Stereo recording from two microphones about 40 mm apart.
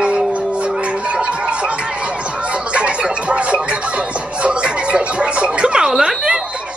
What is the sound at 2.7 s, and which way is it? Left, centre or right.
Music, right.